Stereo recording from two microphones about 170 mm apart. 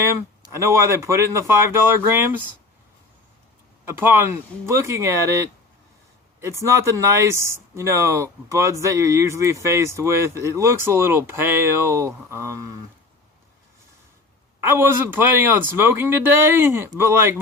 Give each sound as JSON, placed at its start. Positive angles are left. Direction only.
{"t": 0.0, "sound": "speech", "side_deg": -15}
{"t": 3.8, "sound": "speech", "side_deg": -15}
{"t": 14.6, "sound": "speech", "side_deg": -15}